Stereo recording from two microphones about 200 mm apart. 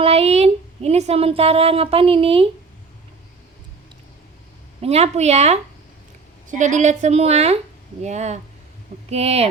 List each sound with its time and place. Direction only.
0.0 s speech: 30° right (ahead or behind)
4.8 s a woman's voice: 30° right (ahead or behind)